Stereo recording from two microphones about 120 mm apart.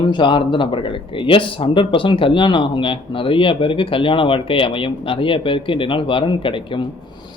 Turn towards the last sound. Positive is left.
turn(degrees=45)  # may be behind; listen again after turning